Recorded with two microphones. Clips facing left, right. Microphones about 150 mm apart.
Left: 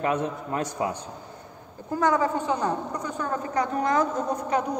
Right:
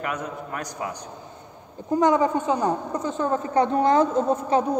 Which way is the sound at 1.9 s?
20° right (ahead or behind).